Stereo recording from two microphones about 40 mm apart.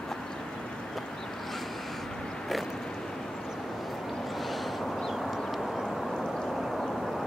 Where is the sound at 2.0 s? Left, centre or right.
Centre.